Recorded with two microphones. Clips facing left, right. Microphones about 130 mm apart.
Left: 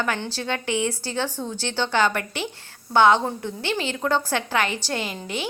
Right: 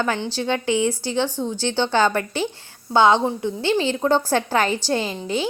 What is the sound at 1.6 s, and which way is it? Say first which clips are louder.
A woman's voice: right 3 dB; 30° right (ahead or behind).